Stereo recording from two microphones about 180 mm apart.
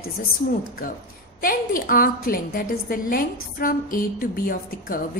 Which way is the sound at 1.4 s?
50° left (ahead or behind).